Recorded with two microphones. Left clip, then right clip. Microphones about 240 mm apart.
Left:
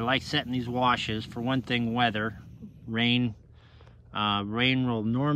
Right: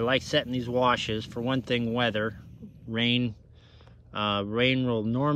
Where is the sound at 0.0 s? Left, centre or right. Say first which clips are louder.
Right 2 dB; centre.